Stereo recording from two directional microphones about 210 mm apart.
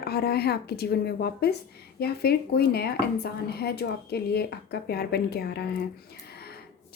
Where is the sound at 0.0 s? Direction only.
50° left (ahead or behind).